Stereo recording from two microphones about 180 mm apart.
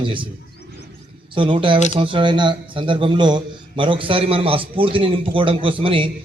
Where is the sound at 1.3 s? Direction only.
30° right (ahead or behind).